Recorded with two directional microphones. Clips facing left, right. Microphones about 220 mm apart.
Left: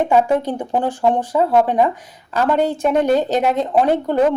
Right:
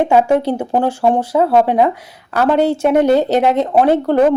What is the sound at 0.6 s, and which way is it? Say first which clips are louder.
Speech: right 3 dB; 40° right (ahead or behind).